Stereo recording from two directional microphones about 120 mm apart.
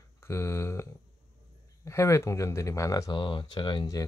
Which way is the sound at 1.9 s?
25° left (ahead or behind).